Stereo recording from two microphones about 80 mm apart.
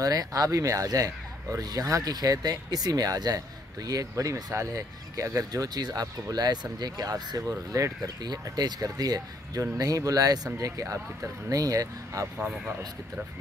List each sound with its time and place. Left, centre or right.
0.0 s speech: right
8.2 s speech: right
12.4 s speech: centre